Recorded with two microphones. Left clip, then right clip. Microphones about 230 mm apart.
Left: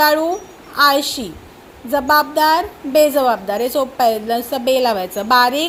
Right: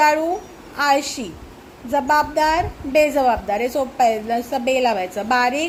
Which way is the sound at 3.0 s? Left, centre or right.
Left.